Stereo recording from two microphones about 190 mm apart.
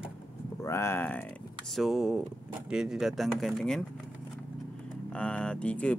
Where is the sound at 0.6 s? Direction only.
15° left (ahead or behind).